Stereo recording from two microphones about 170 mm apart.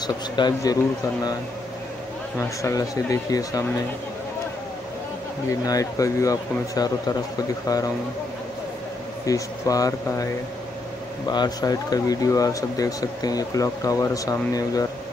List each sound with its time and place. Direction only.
0.0 s speech: 25° left (ahead or behind)
2.6 s speech: 20° left (ahead or behind)
5.5 s speech: 20° left (ahead or behind)
9.2 s speech: 20° left (ahead or behind)